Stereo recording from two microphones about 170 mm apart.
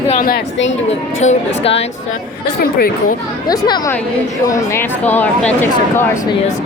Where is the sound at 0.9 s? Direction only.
40° left (ahead or behind).